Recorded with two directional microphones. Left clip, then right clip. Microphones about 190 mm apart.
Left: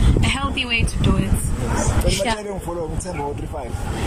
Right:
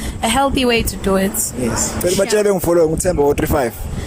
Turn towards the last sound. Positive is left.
turn(degrees=-60)  # may be behind; listen again after turning